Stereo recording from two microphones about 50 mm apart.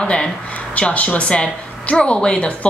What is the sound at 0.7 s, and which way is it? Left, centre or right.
A woman's voice, left.